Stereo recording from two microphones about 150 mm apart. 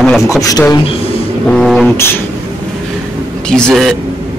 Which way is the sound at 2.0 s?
15° left (ahead or behind).